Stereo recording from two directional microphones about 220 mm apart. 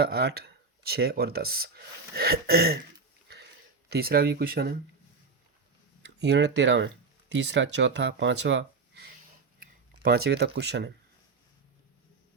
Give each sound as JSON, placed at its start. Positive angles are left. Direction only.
{"t": 0.0, "sound": "speech", "side_deg": -45}
{"t": 3.8, "sound": "speech", "side_deg": -45}
{"t": 6.1, "sound": "speech", "side_deg": -50}
{"t": 9.6, "sound": "speech", "side_deg": -45}